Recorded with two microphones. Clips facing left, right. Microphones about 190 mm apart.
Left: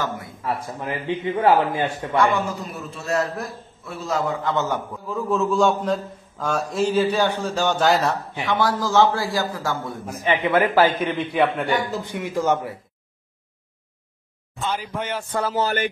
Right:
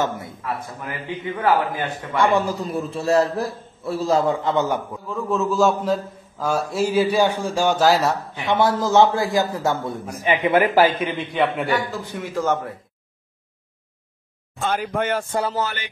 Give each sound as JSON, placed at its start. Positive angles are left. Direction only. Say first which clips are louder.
{"t": 0.0, "sound": "a man's voice", "louder": "right 4 dB", "side_deg": -20}
{"t": 0.3, "sound": "a man's voice", "louder": "left 2 dB", "side_deg": 25}
{"t": 2.1, "sound": "a man's voice", "louder": "right 2 dB", "side_deg": -30}
{"t": 4.6, "sound": "a man's voice", "louder": "right 3 dB", "side_deg": -10}
{"t": 5.0, "sound": "a man's voice", "louder": "left 2 dB", "side_deg": 0}
{"t": 8.5, "sound": "a man's voice", "louder": "right 3 dB", "side_deg": -25}
{"t": 11.1, "sound": "a man's voice", "louder": "left 1 dB", "side_deg": 0}
{"t": 12.1, "sound": "a man's voice", "louder": "left 1 dB", "side_deg": 15}
{"t": 14.6, "sound": "speech", "louder": "right 4 dB", "side_deg": -50}
{"t": 15.6, "sound": "speech", "louder": "left 5 dB", "side_deg": 45}